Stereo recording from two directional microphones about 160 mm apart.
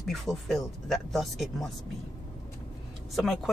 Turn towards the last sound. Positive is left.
turn(degrees=0)  # may be behind; listen again after turning